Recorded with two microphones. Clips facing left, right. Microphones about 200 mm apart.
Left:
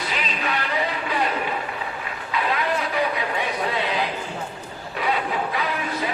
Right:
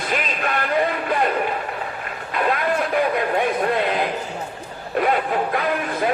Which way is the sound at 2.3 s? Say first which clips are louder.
Right 3 dB; 50° right (ahead or behind).